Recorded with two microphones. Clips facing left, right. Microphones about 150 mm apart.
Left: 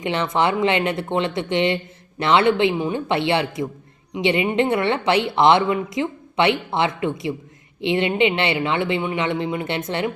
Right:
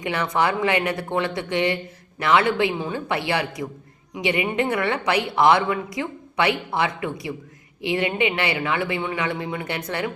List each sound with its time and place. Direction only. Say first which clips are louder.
0.0 s a woman's voice: left 2 dB; 25° left (ahead or behind)